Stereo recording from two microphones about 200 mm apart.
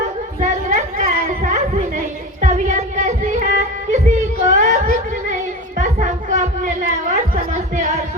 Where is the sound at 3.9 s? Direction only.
35° right (ahead or behind).